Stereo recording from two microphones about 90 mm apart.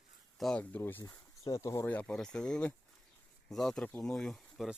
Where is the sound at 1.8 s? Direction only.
15° left (ahead or behind).